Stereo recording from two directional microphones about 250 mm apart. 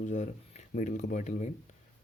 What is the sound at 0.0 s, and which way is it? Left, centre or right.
Speech, left.